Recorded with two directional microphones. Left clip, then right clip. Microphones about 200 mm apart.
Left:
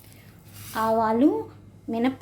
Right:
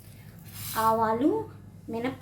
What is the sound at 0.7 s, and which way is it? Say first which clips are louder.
Speech: left 2 dB; 40° left (ahead or behind).